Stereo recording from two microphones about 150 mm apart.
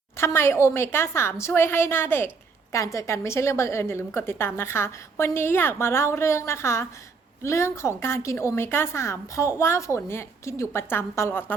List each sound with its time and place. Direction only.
0.2 s a woman's voice: 15° left (ahead or behind)